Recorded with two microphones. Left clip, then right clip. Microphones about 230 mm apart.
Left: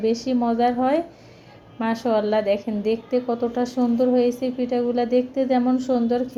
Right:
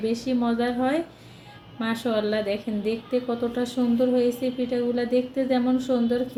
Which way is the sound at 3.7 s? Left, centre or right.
Centre.